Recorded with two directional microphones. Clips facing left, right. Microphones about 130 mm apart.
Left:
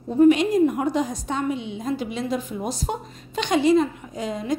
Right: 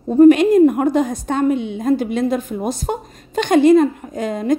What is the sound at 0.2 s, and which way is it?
A woman's voice, 55° right (ahead or behind).